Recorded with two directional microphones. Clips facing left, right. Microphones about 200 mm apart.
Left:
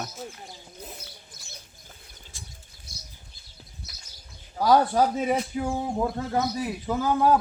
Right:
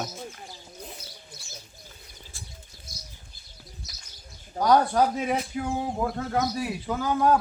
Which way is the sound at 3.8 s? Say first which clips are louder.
Even; 60° left (ahead or behind).